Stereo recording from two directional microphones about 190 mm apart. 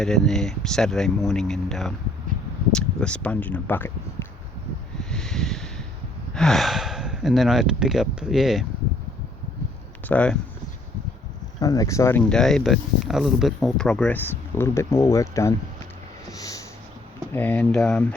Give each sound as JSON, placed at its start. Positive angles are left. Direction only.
{"t": 0.0, "sound": "speech", "side_deg": 5}
{"t": 4.9, "sound": "a sound", "side_deg": 5}
{"t": 6.3, "sound": "speech", "side_deg": 0}
{"t": 10.1, "sound": "speech", "side_deg": 5}
{"t": 11.6, "sound": "speech", "side_deg": 20}
{"t": 16.3, "sound": "a sound", "side_deg": 15}
{"t": 17.3, "sound": "speech", "side_deg": 10}